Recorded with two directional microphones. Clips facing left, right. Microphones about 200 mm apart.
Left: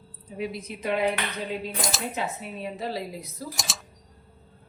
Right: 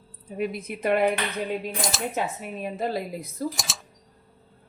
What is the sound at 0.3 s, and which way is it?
Speech, 55° right (ahead or behind).